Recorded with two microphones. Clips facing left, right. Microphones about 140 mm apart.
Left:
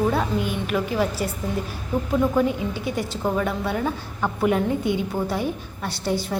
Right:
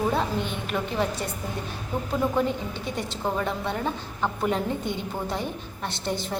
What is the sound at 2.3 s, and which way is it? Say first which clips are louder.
A woman's voice: left 4 dB; 5° left (ahead or behind).